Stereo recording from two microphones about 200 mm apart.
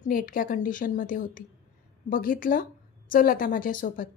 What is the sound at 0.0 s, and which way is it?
A woman's voice, 45° left (ahead or behind).